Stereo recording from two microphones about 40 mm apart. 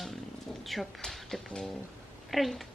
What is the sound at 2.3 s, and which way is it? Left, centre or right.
Speech, centre.